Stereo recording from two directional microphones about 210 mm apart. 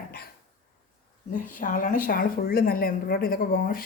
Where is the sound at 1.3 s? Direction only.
40° left (ahead or behind).